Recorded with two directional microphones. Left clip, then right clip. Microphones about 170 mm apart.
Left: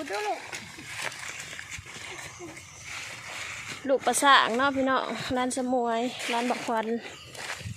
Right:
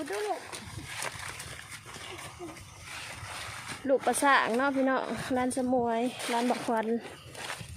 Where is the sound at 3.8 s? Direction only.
5° right (ahead or behind).